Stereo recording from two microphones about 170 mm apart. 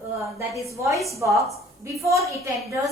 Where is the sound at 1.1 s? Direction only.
15° right (ahead or behind).